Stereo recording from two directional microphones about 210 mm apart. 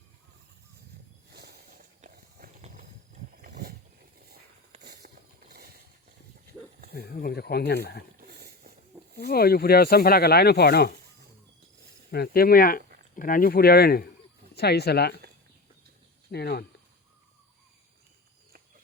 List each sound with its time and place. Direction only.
1.3 s walk: 50° right (ahead or behind)
3.3 s a sound: 45° right (ahead or behind)
4.8 s a sound: 50° right (ahead or behind)
6.9 s speech: 45° left (ahead or behind)
8.2 s wild animals: 50° right (ahead or behind)
9.1 s speech: 50° left (ahead or behind)
12.1 s speech: 45° left (ahead or behind)
16.3 s speech: 50° left (ahead or behind)